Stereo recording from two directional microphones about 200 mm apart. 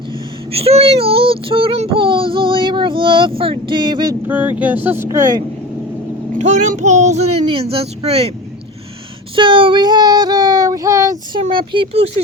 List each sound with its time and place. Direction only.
0.5 s child singing: 30° right (ahead or behind)
4.3 s speech: 10° right (ahead or behind)
6.4 s a child's voice: 40° right (ahead or behind)
9.3 s speech: 25° right (ahead or behind)
11.4 s child singing: 25° right (ahead or behind)